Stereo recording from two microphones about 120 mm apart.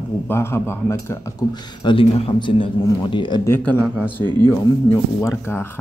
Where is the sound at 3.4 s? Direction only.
20° left (ahead or behind).